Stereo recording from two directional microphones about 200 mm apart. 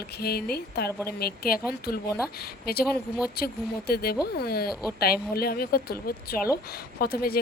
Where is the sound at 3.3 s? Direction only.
50° left (ahead or behind).